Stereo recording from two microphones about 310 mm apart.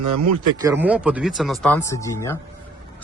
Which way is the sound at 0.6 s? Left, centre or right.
Centre.